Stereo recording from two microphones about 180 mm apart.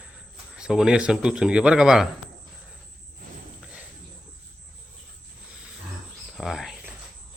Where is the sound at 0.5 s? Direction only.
5° right (ahead or behind).